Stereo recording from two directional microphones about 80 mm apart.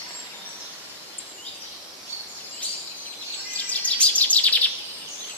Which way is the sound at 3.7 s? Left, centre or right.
Centre.